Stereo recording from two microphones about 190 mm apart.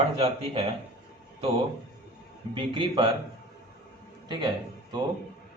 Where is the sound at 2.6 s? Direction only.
25° right (ahead or behind).